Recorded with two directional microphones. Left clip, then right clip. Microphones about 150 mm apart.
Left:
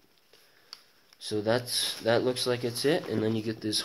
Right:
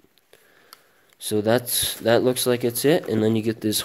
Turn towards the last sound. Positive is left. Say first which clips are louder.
# right 7 dB
turn(degrees=-50)  # may be behind; listen again after turning